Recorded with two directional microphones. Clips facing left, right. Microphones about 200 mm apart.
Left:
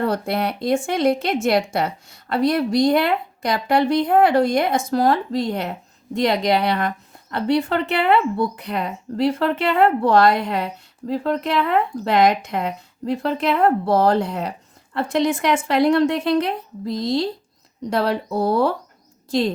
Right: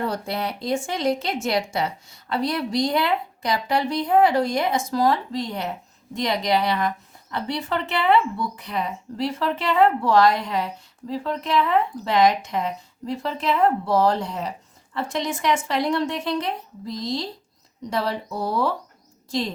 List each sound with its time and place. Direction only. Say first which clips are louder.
0.0 s a woman's voice: left 5 dB; 60° left (ahead or behind)